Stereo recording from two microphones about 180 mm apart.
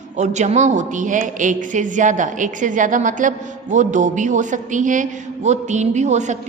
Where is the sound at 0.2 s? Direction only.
40° right (ahead or behind).